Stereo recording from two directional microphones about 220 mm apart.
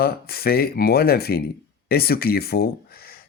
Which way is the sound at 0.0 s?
45° left (ahead or behind).